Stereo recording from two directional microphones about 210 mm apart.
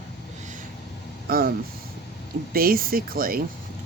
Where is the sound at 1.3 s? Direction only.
45° right (ahead or behind).